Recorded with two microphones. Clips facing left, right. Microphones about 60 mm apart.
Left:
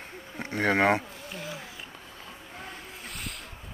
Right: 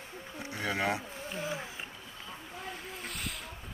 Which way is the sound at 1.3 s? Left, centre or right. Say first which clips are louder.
Right 2 dB; right.